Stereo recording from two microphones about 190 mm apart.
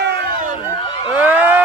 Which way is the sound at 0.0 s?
60° right (ahead or behind).